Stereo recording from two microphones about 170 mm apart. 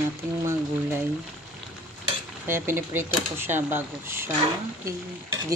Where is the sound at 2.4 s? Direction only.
15° right (ahead or behind).